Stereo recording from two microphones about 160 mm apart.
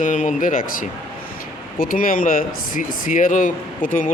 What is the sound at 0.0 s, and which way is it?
Speech, 50° left (ahead or behind).